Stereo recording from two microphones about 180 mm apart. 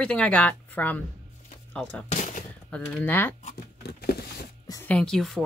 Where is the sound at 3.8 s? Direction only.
60° left (ahead or behind).